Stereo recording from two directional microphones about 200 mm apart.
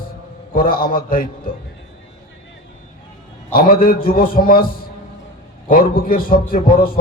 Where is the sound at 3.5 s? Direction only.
45° left (ahead or behind).